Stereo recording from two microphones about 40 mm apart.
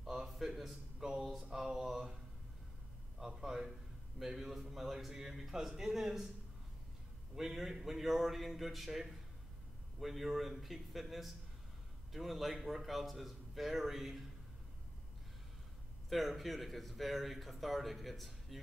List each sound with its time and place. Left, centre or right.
0.0 s a sound: centre
1.5 s mantra: centre
3.2 s a man's voice: centre
7.3 s speech: centre
16.1 s speech: centre